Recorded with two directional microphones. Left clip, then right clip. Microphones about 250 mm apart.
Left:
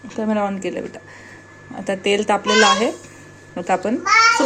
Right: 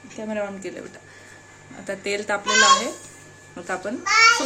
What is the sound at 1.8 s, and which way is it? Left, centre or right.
Speech, centre.